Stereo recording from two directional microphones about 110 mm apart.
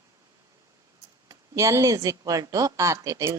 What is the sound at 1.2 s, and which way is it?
A woman's voice, 30° right (ahead or behind).